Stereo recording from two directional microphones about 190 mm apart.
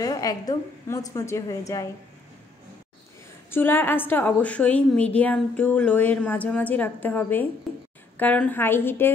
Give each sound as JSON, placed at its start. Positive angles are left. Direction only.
{"t": 0.0, "sound": "a woman's voice", "side_deg": 20}
{"t": 3.4, "sound": "a woman's voice", "side_deg": 10}